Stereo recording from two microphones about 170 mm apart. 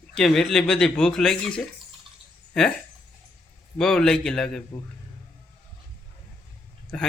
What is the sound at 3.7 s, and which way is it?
Speech, 5° left (ahead or behind).